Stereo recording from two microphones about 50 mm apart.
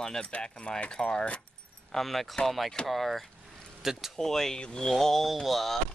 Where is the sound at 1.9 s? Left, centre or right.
Centre.